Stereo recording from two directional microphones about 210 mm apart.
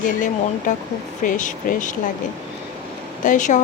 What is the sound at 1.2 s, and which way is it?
Speech, 40° left (ahead or behind).